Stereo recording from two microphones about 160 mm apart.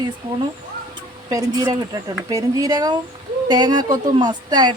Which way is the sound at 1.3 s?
25° right (ahead or behind).